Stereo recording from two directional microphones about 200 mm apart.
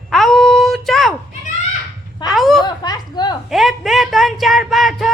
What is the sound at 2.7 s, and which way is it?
Speech, 20° left (ahead or behind).